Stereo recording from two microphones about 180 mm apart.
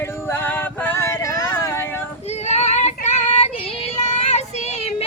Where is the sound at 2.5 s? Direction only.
40° left (ahead or behind).